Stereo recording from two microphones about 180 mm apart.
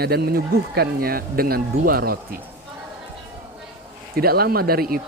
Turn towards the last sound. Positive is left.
turn(degrees=-55)  # may be behind; listen again after turning